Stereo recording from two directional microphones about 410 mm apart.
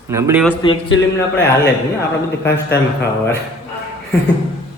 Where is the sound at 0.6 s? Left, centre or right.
Centre.